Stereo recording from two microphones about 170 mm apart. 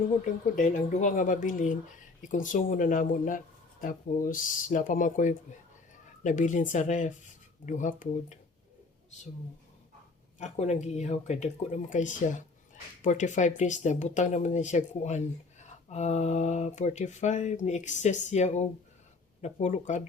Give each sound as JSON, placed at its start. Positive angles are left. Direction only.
{"t": 0.5, "sound": "speech", "side_deg": 50}
{"t": 10.3, "sound": "speech", "side_deg": 40}